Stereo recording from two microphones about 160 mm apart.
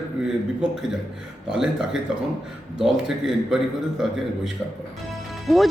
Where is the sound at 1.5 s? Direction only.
5° right (ahead or behind).